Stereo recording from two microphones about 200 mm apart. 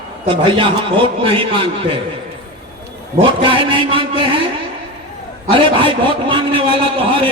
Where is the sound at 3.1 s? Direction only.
25° right (ahead or behind).